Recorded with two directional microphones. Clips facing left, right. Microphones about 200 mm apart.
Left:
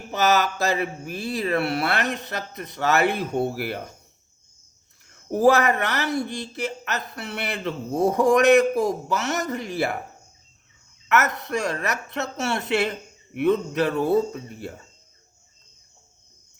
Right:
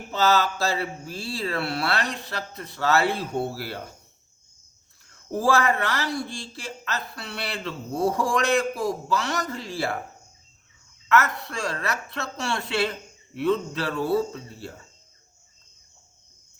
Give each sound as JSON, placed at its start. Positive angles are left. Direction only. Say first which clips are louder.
{"t": 0.1, "sound": "speech", "louder": "left 1 dB", "side_deg": 15}
{"t": 5.3, "sound": "speech", "louder": "left 4 dB", "side_deg": 20}
{"t": 11.1, "sound": "speech", "louder": "left 1 dB", "side_deg": 20}